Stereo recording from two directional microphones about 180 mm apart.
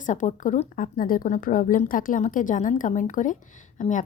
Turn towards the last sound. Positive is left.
turn(degrees=45)  # may be behind; listen again after turning